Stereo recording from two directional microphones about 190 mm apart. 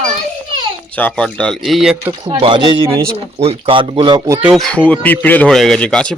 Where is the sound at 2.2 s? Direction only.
25° right (ahead or behind).